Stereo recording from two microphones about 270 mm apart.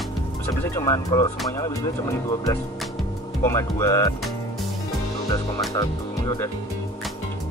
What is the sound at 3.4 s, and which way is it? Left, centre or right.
Speech, centre.